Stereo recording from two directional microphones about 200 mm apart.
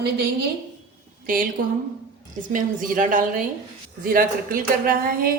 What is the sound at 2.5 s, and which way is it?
A woman's voice, 40° right (ahead or behind).